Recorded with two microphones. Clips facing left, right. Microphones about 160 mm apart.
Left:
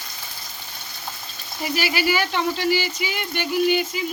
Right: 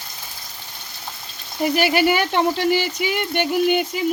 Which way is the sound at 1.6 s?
55° right (ahead or behind).